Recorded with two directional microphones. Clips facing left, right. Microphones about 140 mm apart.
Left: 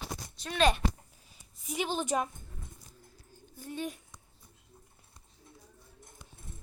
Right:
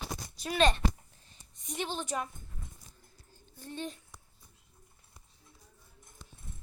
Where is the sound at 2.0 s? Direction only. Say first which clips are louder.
Left 5 dB; 20° left (ahead or behind).